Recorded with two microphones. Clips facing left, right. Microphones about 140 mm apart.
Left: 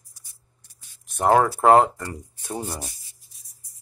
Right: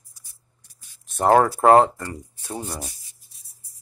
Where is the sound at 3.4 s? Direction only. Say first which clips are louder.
Even; 30° right (ahead or behind).